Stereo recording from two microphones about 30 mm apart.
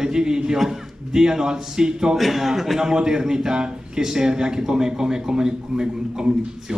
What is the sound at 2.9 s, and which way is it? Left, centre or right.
A man's voice, right.